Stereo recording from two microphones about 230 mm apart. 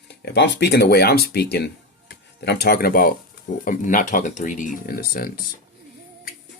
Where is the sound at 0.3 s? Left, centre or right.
Left.